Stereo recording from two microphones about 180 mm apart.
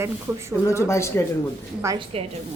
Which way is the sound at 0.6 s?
15° left (ahead or behind).